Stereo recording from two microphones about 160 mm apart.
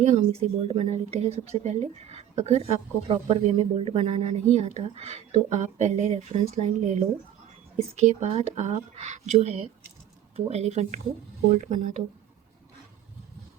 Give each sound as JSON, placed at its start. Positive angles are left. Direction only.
{"t": 0.1, "sound": "speech", "side_deg": -40}